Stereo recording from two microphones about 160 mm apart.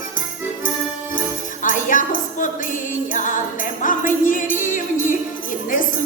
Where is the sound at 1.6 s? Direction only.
55° left (ahead or behind).